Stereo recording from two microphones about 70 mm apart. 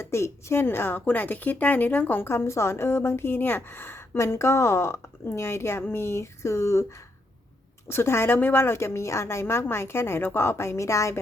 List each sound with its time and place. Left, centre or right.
0.0 s speech: left
7.9 s speech: left